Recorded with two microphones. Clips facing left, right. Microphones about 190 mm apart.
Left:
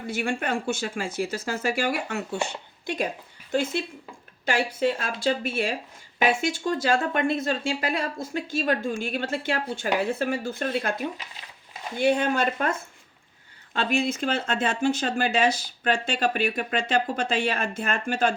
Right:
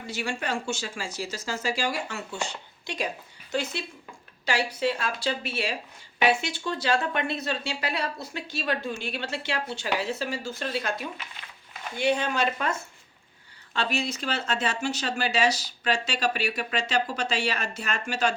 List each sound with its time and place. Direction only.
0.1 s speech: 55° left (ahead or behind)